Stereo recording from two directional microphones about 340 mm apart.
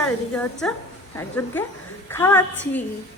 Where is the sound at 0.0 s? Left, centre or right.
Centre.